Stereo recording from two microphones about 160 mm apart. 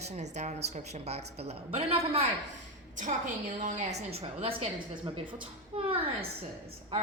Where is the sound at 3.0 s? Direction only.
50° right (ahead or behind); by 5.1 s 35° right (ahead or behind).